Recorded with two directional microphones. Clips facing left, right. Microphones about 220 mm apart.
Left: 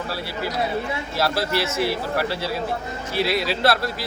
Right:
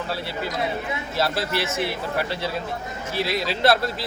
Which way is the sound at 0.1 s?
25° right (ahead or behind).